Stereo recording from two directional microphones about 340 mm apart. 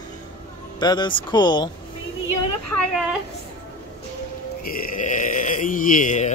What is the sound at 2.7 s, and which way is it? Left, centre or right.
Speech, centre.